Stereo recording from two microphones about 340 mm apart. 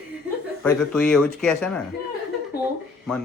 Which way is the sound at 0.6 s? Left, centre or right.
Centre.